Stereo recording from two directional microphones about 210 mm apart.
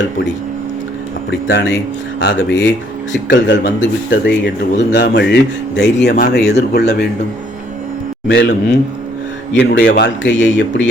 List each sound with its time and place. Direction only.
1.3 s speech: 60° left (ahead or behind)
8.3 s speech: 55° left (ahead or behind)